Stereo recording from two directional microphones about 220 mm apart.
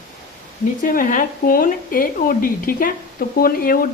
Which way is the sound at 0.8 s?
40° left (ahead or behind).